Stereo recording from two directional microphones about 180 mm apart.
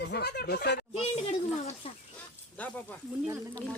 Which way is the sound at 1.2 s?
30° left (ahead or behind).